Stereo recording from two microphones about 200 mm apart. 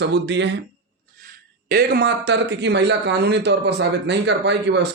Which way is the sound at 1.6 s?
50° right (ahead or behind).